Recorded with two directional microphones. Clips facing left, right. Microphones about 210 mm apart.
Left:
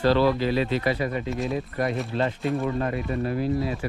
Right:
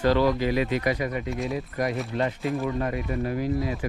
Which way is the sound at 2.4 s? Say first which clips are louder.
Left 1 dB; centre (ahead or behind).